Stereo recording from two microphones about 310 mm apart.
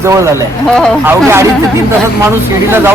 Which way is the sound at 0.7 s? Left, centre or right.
Centre.